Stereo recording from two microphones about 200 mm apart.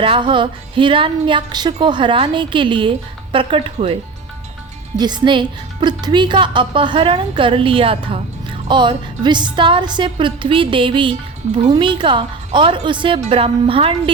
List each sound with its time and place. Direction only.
0.0 s speech: 25° right (ahead or behind)
4.9 s speech: 20° right (ahead or behind)